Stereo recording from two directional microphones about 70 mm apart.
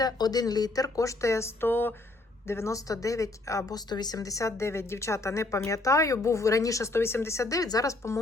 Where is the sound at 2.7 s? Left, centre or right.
Left.